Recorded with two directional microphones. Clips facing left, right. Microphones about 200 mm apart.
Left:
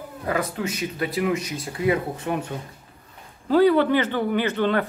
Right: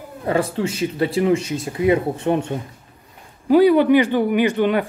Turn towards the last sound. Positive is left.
turn(degrees=-15)  # may be behind; listen again after turning